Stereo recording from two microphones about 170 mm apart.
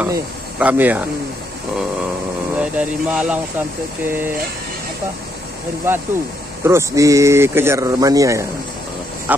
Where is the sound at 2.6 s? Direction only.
5° right (ahead or behind).